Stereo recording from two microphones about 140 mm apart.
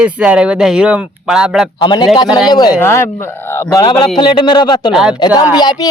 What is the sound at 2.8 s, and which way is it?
A man's voice, 20° left (ahead or behind).